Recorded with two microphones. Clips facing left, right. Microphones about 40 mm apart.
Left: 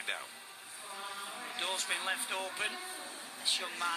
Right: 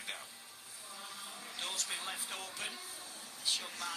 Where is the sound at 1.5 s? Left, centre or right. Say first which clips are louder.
Left 5 dB; left.